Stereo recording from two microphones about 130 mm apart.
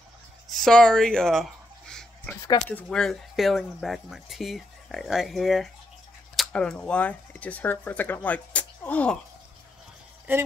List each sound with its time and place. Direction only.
0.5 s a sound: 5° left (ahead or behind)
2.6 s speech: 5° left (ahead or behind)
10.3 s speech: 15° right (ahead or behind)